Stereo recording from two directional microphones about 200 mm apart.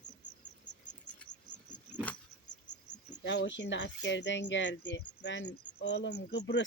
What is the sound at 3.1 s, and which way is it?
Speech, 60° left (ahead or behind).